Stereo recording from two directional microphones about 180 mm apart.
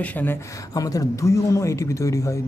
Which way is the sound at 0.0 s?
10° left (ahead or behind).